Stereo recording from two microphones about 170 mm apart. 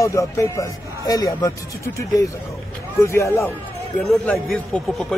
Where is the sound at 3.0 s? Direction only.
15° left (ahead or behind).